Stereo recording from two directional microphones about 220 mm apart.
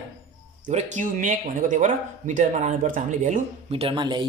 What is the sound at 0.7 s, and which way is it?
Speech, 30° right (ahead or behind).